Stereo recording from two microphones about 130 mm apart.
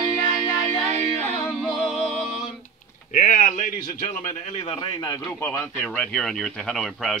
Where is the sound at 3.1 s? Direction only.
80° left.